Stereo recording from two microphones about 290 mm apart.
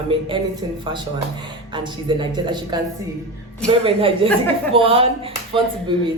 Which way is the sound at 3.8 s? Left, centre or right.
Centre.